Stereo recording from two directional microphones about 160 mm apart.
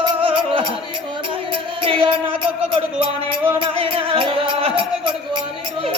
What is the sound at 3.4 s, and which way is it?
Music, 35° right (ahead or behind).